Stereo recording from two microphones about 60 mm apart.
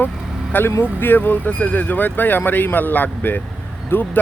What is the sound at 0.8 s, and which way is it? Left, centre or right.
Speech, left.